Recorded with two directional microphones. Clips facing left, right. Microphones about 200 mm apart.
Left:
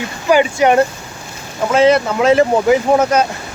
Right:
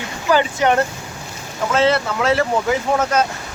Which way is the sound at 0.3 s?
15° left (ahead or behind).